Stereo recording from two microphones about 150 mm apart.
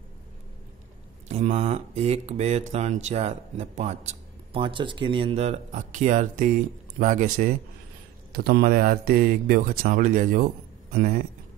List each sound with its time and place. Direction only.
1.3 s speech: 45° right (ahead or behind)
4.6 s speech: 35° right (ahead or behind); by 7.5 s 60° right (ahead or behind)
8.3 s speech: 90° right; by 11.2 s 65° right (ahead or behind)